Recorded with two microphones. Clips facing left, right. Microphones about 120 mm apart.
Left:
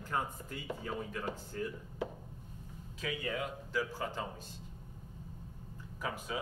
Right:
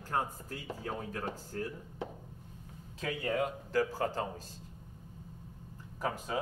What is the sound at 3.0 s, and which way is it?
A man's voice, 40° right (ahead or behind).